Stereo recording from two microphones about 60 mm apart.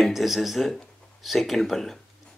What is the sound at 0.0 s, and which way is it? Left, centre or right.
Speech, centre.